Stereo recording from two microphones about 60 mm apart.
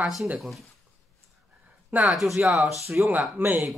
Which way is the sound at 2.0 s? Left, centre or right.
Centre.